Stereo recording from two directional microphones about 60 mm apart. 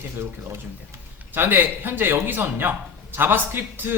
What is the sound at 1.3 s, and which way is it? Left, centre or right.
Speech, right.